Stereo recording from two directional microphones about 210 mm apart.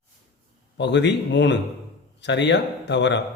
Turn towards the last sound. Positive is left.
turn(degrees=55)  # may be behind; listen again after turning